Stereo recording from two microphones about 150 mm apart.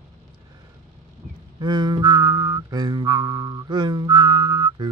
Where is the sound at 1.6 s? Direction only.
30° right (ahead or behind).